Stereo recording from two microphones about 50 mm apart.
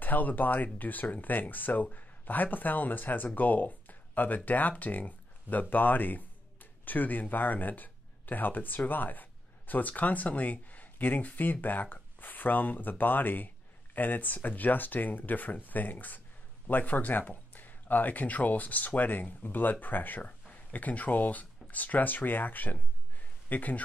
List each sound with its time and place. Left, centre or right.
0.0 s speech: left